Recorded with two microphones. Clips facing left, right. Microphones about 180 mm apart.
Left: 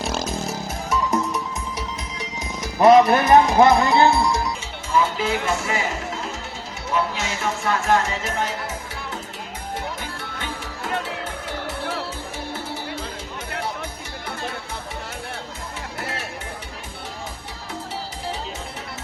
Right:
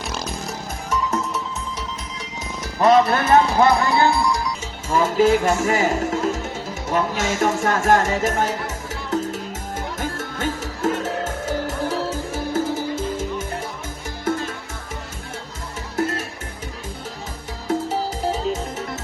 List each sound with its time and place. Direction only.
0.9 s music: 10° left (ahead or behind)
2.7 s speech: 10° left (ahead or behind)
4.9 s music: 45° right (ahead or behind)
10.0 s music: 45° right (ahead or behind)